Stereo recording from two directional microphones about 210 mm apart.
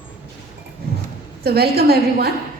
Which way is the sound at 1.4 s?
50° right (ahead or behind).